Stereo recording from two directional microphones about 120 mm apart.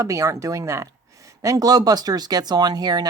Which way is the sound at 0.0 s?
25° right (ahead or behind).